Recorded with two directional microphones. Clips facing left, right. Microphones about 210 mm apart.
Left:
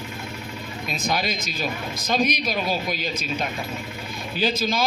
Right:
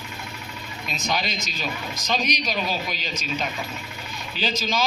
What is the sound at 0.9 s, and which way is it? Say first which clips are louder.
A man's voice: left 2 dB; 55° left (ahead or behind).